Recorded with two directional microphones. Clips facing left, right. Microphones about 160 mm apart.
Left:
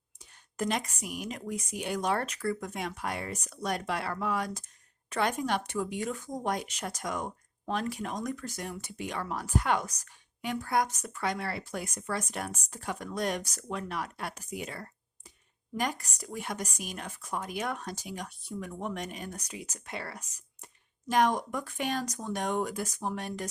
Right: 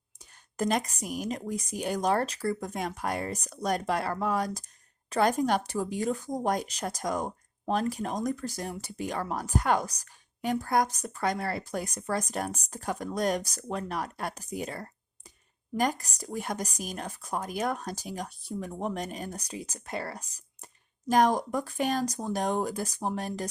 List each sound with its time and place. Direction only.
0.5 s a woman's voice: 40° right (ahead or behind)